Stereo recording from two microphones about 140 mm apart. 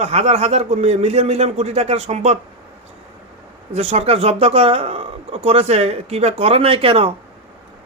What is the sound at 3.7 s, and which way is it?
Speech, 50° right (ahead or behind).